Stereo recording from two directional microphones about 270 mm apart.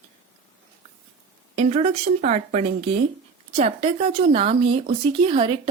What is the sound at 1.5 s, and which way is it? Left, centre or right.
Speech, right.